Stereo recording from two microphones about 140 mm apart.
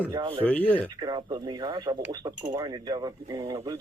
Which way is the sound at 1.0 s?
30° right (ahead or behind).